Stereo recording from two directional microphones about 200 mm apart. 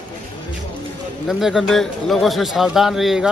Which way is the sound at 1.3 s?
Centre (ahead or behind).